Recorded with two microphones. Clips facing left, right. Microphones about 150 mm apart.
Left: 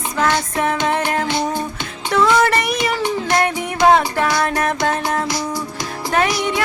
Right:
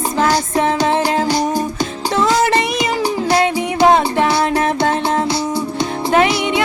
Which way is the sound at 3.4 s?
20° right (ahead or behind).